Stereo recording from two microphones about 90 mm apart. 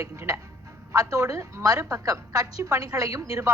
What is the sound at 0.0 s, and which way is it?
A woman's voice, 30° right (ahead or behind).